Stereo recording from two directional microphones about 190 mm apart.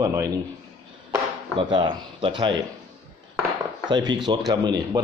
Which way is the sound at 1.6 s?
25° right (ahead or behind).